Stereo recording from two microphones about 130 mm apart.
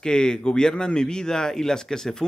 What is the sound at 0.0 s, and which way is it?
Speech, 5° left (ahead or behind).